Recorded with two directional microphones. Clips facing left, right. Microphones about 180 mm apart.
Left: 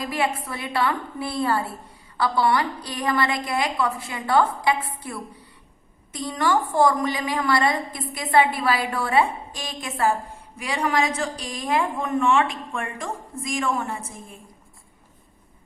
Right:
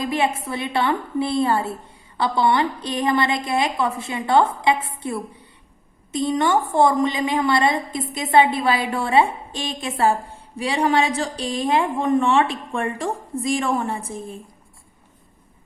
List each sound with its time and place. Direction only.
0.0 s a woman's voice: 25° right (ahead or behind)